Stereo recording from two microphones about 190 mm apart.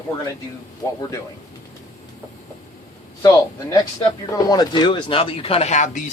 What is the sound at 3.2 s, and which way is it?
Speech, 15° left (ahead or behind).